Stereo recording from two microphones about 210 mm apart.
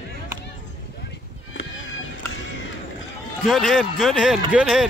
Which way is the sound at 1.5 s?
70° left (ahead or behind).